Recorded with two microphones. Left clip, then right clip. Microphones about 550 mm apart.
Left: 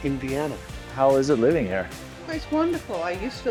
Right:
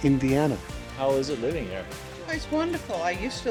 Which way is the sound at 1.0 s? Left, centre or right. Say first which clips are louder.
Left 6 dB; left.